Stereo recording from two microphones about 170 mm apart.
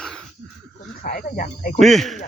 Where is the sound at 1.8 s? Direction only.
Centre (ahead or behind).